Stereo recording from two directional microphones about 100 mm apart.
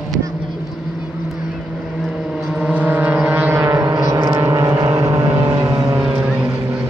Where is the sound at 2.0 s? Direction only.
Centre (ahead or behind); by 3.9 s 30° right (ahead or behind).